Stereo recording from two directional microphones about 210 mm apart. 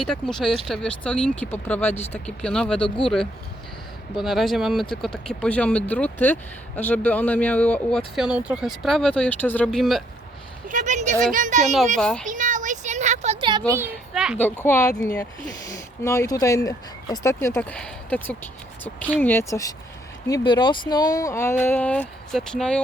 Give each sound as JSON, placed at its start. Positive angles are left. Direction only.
{"t": 0.0, "sound": "speech", "side_deg": 0}
{"t": 4.1, "sound": "speech", "side_deg": 0}
{"t": 10.7, "sound": "speech", "side_deg": -35}
{"t": 11.9, "sound": "speech", "side_deg": 5}
{"t": 12.2, "sound": "a sound", "side_deg": -35}
{"t": 13.7, "sound": "a child's voice", "side_deg": -10}
{"t": 14.3, "sound": "speech", "side_deg": 10}